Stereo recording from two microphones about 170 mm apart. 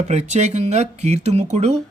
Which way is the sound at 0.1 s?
40° right (ahead or behind).